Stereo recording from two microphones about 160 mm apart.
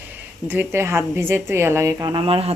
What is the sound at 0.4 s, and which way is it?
Speech, 15° right (ahead or behind).